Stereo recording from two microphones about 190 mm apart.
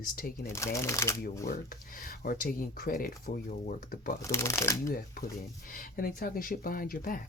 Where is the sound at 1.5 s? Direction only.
45° left (ahead or behind).